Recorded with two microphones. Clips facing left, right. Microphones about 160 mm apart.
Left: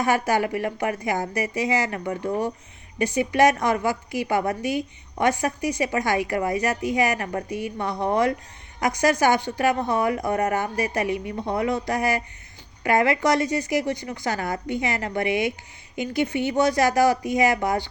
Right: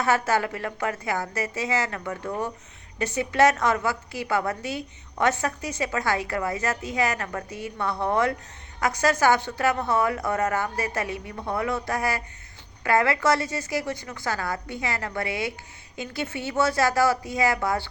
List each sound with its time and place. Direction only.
0.0 s a woman's voice: 15° left (ahead or behind)